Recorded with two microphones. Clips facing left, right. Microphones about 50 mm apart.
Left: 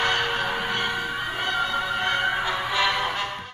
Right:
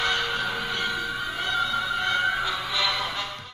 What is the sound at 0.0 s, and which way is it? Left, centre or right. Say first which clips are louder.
Music: left 2 dB; left.